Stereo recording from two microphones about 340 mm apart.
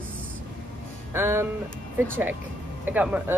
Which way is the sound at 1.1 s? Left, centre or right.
Centre.